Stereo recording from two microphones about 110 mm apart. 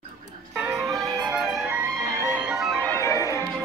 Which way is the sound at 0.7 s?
25° right (ahead or behind).